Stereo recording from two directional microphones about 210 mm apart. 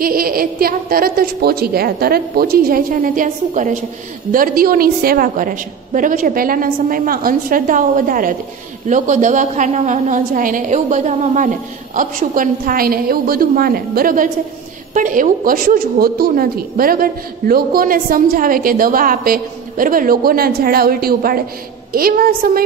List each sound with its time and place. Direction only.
0.0 s a woman's voice: 45° right (ahead or behind)